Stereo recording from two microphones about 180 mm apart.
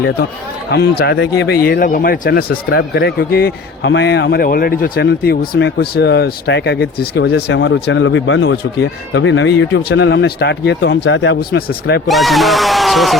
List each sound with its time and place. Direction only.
0.7 s speech: 60° left (ahead or behind)
1.6 s speech: 55° left (ahead or behind)
2.6 s a man's voice: 80° left; by 12.0 s 65° left (ahead or behind)
12.0 s speech: centre (ahead or behind)